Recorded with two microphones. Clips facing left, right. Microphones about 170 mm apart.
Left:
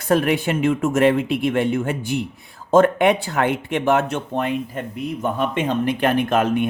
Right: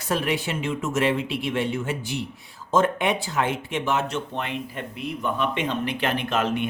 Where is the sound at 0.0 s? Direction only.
55° left (ahead or behind).